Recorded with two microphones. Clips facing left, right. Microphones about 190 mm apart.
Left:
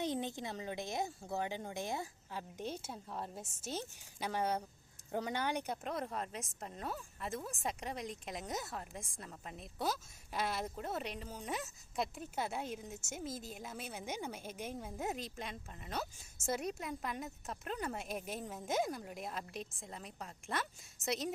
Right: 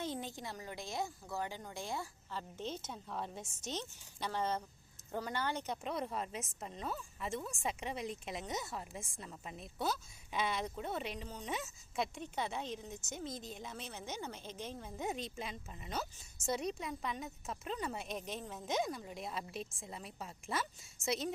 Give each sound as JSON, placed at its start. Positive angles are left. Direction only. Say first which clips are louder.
{"t": 0.0, "sound": "a woman's voice", "louder": "left 3 dB", "side_deg": 20}